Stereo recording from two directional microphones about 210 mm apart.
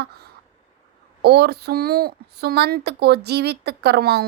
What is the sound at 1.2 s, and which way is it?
A woman's voice, 50° right (ahead or behind).